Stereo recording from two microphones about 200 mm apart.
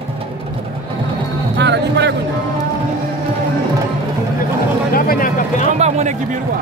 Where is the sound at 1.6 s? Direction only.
60° right (ahead or behind).